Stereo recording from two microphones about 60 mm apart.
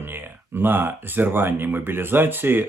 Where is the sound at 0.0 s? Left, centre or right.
Right.